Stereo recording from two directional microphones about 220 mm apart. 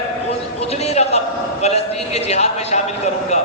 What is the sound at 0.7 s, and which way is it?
A man's voice, 30° left (ahead or behind).